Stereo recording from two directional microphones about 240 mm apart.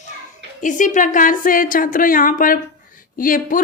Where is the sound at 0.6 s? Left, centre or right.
Left.